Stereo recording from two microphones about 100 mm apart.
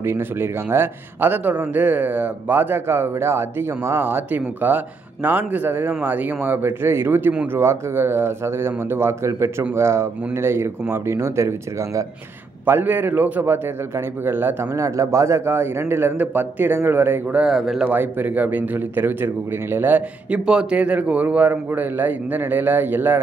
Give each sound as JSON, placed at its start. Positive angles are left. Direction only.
{"t": 0.0, "sound": "speech", "side_deg": -25}
{"t": 12.6, "sound": "speech", "side_deg": -20}
{"t": 17.4, "sound": "speech", "side_deg": -5}
{"t": 17.9, "sound": "speech", "side_deg": -20}